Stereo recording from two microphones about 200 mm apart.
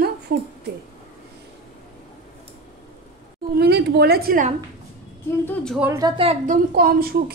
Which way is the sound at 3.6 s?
55° right (ahead or behind).